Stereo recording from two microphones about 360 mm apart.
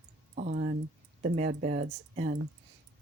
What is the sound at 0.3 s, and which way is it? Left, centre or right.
Speech, right.